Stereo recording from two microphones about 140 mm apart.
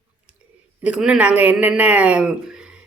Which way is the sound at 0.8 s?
10° right (ahead or behind).